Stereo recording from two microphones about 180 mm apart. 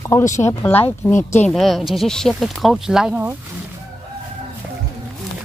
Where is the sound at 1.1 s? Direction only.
40° left (ahead or behind).